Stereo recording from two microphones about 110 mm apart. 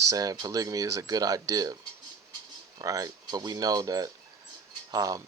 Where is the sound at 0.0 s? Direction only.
30° right (ahead or behind).